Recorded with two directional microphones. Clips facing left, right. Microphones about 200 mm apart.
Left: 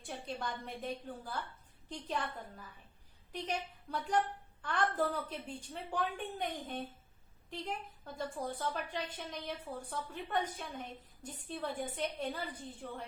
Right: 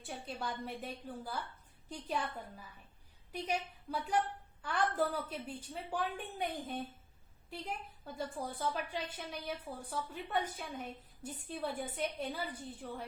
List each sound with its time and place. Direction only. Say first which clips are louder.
0.0 s a woman's voice: left 1 dB; 5° right (ahead or behind)